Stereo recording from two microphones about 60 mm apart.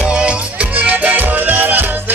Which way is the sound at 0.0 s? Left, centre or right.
Centre.